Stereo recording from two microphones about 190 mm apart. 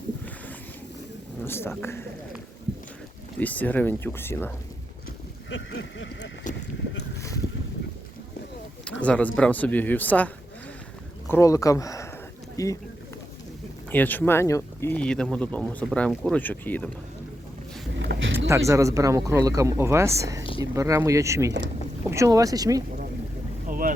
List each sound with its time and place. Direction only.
1.5 s speech: 10° left (ahead or behind)
3.3 s speech: 10° left (ahead or behind)
5.5 s speech: 80° left
8.8 s speech: 5° left (ahead or behind)
13.9 s speech: 10° left (ahead or behind)
18.0 s a sound: 65° right (ahead or behind)
18.4 s speech: 15° right (ahead or behind)
23.6 s boat: 45° right (ahead or behind)